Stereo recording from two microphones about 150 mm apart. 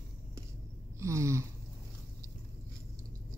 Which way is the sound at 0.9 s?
20° right (ahead or behind).